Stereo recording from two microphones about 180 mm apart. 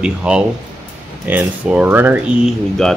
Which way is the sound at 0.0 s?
5° right (ahead or behind).